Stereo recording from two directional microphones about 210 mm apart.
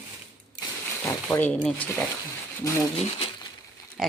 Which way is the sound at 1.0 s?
10° left (ahead or behind).